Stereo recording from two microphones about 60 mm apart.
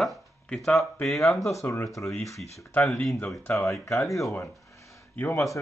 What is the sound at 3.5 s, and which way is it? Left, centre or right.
Speech, left.